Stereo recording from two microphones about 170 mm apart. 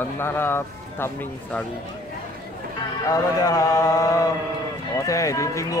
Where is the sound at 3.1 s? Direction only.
20° left (ahead or behind).